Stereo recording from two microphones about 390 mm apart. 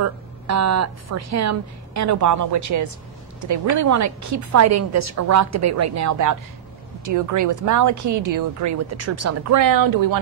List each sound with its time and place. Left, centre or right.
0.0 s speech: right